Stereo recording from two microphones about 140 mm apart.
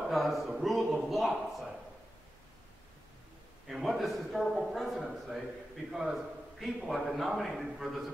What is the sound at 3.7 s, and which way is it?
A man's voice, centre (ahead or behind).